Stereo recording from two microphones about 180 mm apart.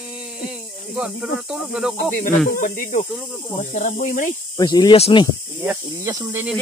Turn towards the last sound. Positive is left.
turn(degrees=-15)  # may be behind; listen again after turning